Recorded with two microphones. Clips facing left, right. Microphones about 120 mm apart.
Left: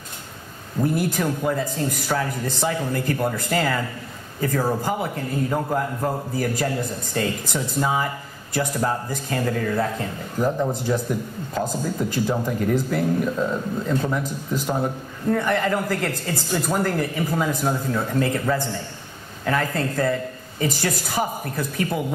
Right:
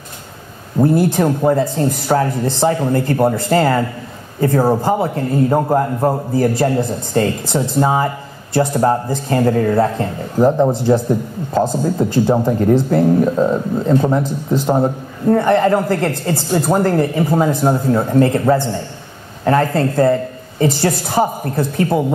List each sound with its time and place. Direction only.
0.7 s a man's voice: 30° right (ahead or behind)